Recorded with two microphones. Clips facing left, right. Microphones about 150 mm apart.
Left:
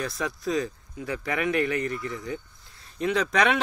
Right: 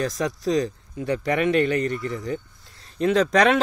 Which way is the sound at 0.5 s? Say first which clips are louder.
Right 4 dB; 35° right (ahead or behind).